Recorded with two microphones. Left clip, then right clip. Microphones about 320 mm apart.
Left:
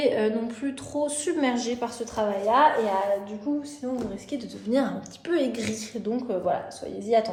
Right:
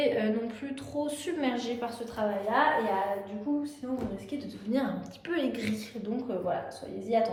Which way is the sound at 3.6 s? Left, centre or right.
Left.